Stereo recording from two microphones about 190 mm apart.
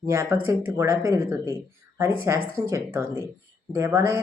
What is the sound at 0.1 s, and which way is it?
Speech, 15° right (ahead or behind).